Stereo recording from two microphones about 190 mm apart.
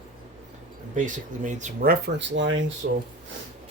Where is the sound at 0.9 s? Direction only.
40° right (ahead or behind); by 2.6 s 75° right (ahead or behind).